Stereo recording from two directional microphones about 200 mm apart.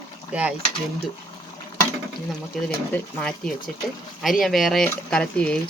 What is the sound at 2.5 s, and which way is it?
Speech, centre (ahead or behind).